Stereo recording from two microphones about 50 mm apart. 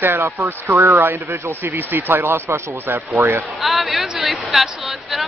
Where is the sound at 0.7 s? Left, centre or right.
Right.